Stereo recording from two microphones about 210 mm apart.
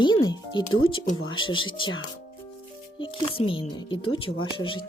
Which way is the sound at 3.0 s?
25° left (ahead or behind).